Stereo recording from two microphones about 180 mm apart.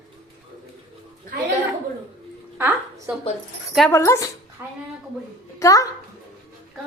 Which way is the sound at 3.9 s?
15° left (ahead or behind).